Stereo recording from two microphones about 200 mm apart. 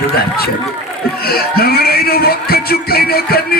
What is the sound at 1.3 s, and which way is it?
Music, 50° left (ahead or behind).